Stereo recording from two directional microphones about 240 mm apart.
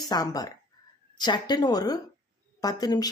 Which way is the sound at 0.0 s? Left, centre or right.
Centre.